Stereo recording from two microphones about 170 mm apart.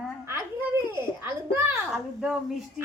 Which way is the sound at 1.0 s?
15° right (ahead or behind).